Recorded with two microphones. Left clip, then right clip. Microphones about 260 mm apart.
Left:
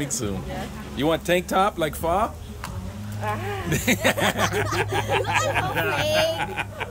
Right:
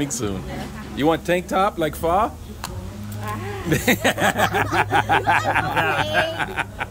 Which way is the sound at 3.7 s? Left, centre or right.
Centre.